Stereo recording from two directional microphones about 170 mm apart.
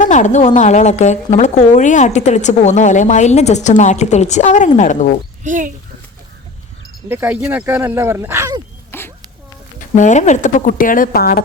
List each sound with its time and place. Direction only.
0.0 s a woman's voice: 45° left (ahead or behind)
5.4 s speech: 50° right (ahead or behind)
7.1 s speech: 10° right (ahead or behind)
8.9 s a sound: 15° left (ahead or behind)
9.7 s a woman's voice: 45° left (ahead or behind)